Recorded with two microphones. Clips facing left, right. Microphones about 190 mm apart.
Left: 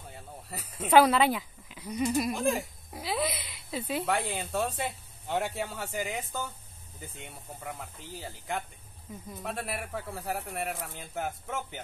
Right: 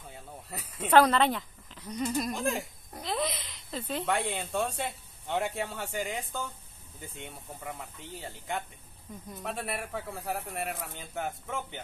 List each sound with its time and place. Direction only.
0.1 s speech: centre (ahead or behind)